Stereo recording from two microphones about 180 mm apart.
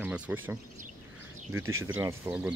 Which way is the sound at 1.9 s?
15° right (ahead or behind).